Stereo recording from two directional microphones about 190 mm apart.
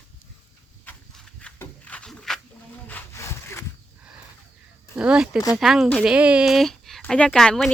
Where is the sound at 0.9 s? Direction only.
5° left (ahead or behind).